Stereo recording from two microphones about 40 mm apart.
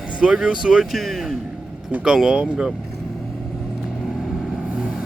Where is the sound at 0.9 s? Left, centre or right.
Centre.